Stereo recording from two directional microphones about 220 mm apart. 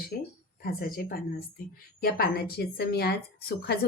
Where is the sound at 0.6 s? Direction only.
40° left (ahead or behind).